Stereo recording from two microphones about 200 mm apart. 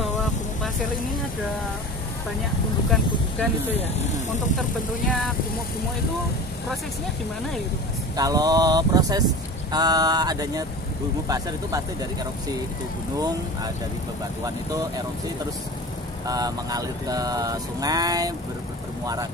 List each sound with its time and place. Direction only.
2.9 s speech: 5° left (ahead or behind)
8.2 s speech: 20° right (ahead or behind)
16.3 s speech: 20° right (ahead or behind)